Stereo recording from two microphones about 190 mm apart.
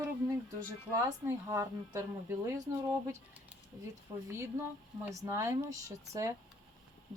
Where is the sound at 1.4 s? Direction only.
15° right (ahead or behind).